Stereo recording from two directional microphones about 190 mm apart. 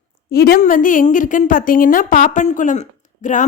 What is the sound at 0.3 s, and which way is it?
A woman's voice, 55° left (ahead or behind).